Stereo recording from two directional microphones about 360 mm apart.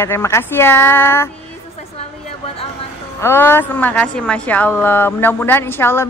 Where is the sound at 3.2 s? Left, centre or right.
Centre.